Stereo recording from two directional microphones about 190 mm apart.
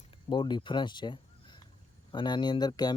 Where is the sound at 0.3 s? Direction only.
25° left (ahead or behind).